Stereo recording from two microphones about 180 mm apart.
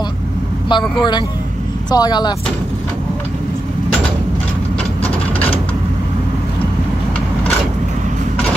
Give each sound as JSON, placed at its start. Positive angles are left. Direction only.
{"t": 0.7, "sound": "speech", "side_deg": 25}